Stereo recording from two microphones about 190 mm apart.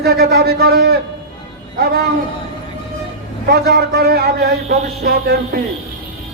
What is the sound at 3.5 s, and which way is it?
Speech, 60° right (ahead or behind).